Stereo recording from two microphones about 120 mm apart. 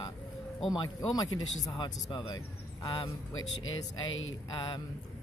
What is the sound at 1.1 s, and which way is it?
Speech, 30° left (ahead or behind).